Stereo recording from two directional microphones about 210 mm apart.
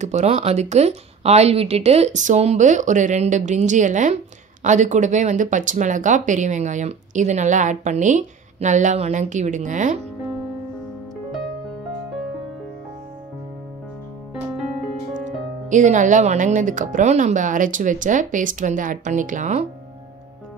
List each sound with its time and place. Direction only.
0.0 s speech: 35° right (ahead or behind)
15.1 s speech: 35° right (ahead or behind)